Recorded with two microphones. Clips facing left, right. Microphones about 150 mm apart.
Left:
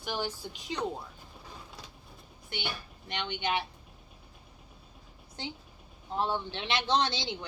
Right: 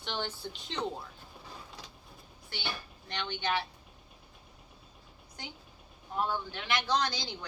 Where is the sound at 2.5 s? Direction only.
20° left (ahead or behind).